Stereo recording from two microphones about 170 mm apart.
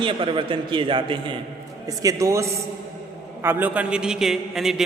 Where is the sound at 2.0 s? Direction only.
20° right (ahead or behind).